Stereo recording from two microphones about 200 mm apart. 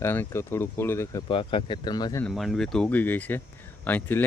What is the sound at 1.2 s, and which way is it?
Speech, 25° left (ahead or behind).